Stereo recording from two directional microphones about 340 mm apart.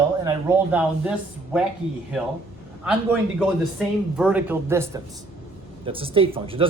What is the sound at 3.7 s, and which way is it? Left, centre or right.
A woman's voice, centre.